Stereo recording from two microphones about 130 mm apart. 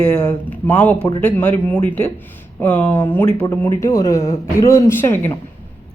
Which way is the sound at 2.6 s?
10° left (ahead or behind).